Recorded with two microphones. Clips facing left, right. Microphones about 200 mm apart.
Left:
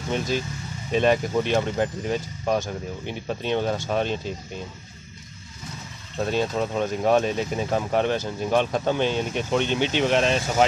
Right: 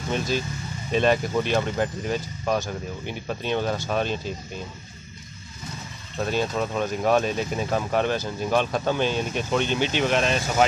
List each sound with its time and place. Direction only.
0.1 s speech: 20° left (ahead or behind)
6.1 s speech: 25° left (ahead or behind)